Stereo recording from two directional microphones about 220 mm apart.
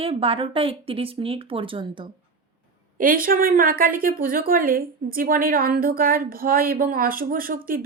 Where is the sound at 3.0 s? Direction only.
40° right (ahead or behind).